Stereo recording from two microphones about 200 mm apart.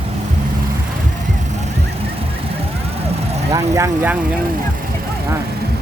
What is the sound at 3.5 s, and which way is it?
Speech, 15° right (ahead or behind).